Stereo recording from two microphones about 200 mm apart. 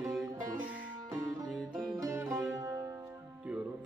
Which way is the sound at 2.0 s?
15° right (ahead or behind).